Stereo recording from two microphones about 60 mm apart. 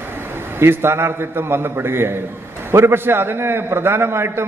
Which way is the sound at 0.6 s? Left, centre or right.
Right.